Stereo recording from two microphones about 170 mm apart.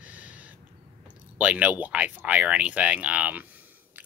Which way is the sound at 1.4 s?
10° right (ahead or behind).